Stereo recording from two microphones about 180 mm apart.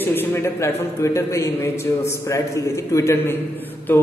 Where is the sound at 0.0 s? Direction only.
10° left (ahead or behind).